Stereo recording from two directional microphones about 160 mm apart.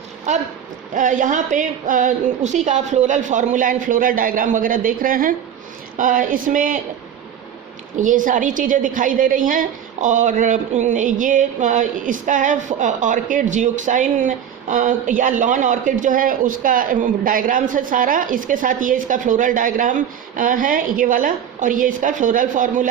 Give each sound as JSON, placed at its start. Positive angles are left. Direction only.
{"t": 0.3, "sound": "a woman's voice", "side_deg": -50}
{"t": 7.9, "sound": "a woman's voice", "side_deg": -55}